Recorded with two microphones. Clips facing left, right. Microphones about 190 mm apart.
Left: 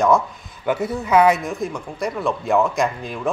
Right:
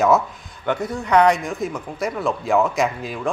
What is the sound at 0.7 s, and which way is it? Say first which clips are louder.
Speech: left 1 dB; 5° left (ahead or behind).